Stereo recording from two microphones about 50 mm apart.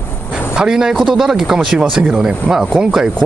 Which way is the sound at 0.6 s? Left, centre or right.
Centre.